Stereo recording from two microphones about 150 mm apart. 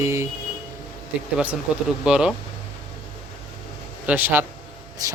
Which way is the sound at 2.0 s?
5° right (ahead or behind).